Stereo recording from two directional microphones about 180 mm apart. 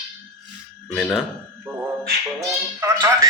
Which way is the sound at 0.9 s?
Centre (ahead or behind).